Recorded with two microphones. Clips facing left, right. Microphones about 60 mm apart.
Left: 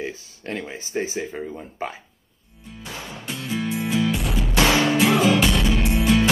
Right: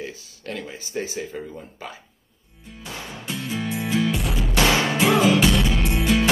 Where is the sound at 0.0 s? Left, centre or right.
Left.